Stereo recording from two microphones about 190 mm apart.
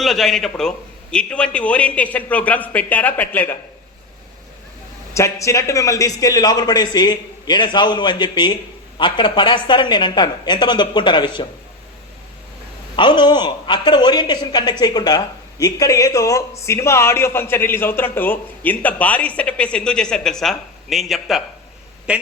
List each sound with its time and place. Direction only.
0.0 s a man's voice: centre (ahead or behind)
5.1 s a woman's voice: 15° left (ahead or behind)
13.0 s a woman's voice: 25° left (ahead or behind); by 22.2 s 5° right (ahead or behind)